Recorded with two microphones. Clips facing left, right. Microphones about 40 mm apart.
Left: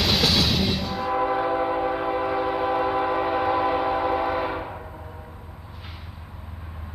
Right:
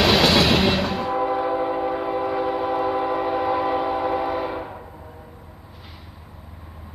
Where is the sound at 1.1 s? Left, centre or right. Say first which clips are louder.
Left 1 dB; centre.